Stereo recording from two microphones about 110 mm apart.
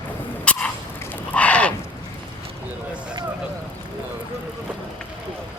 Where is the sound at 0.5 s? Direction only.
10° left (ahead or behind).